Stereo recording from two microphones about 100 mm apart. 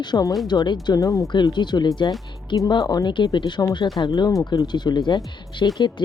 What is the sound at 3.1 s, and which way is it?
Speech, 45° left (ahead or behind).